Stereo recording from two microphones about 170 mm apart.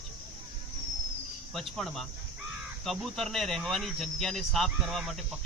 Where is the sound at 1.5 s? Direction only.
Centre (ahead or behind).